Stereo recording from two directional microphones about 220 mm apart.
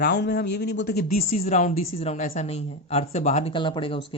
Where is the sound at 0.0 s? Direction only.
50° left (ahead or behind).